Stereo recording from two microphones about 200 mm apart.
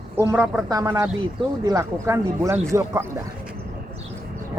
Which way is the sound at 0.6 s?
15° right (ahead or behind).